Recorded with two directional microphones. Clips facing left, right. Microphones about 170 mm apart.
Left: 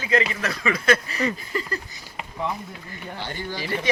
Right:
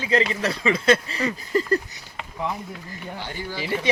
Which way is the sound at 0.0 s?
30° right (ahead or behind).